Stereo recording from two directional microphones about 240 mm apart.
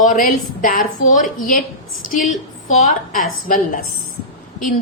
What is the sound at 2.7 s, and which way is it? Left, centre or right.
A woman's voice, left.